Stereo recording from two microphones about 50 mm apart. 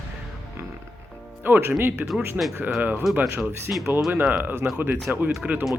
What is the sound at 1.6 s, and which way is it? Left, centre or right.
Speech, right.